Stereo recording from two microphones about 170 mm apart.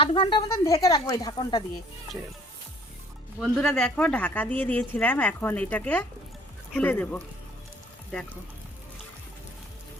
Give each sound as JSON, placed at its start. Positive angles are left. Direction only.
{"t": 0.0, "sound": "speech", "side_deg": 30}
{"t": 3.4, "sound": "speech", "side_deg": 5}